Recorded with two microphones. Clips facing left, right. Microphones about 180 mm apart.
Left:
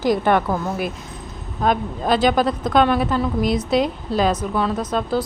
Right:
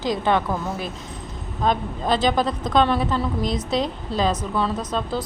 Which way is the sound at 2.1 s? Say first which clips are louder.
Left 3 dB; 25° right (ahead or behind).